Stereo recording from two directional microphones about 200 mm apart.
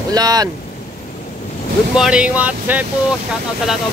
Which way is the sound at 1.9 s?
5° right (ahead or behind).